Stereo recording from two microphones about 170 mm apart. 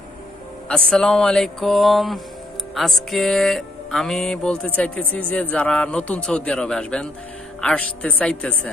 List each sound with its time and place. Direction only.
0.7 s music: 5° left (ahead or behind)
7.6 s a woman's voice: 5° left (ahead or behind)